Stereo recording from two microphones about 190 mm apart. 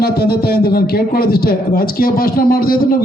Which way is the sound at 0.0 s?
55° left (ahead or behind).